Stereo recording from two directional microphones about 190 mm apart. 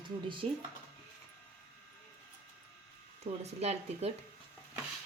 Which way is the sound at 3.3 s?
35° right (ahead or behind).